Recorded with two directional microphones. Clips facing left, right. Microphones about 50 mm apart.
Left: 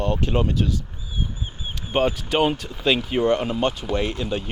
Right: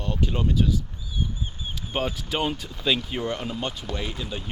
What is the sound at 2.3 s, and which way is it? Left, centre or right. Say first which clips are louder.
Speech: left 5 dB; centre.